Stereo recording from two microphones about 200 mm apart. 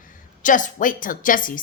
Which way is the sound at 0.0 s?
40° left (ahead or behind).